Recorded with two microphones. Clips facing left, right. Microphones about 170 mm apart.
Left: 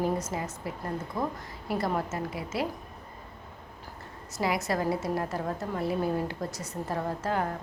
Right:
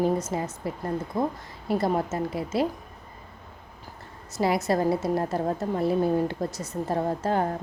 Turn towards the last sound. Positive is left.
turn(degrees=-25)  # may be behind; listen again after turning